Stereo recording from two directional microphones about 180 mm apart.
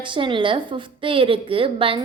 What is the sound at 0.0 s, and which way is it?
A woman's voice, 25° right (ahead or behind).